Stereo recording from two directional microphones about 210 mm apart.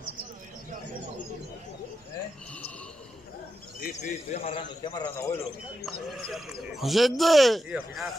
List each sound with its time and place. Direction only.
3.8 s speech: 35° left (ahead or behind); by 5.4 s 10° left (ahead or behind)
6.1 s speech: centre (ahead or behind)